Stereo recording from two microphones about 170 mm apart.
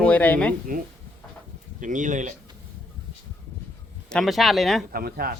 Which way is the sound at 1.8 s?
50° right (ahead or behind).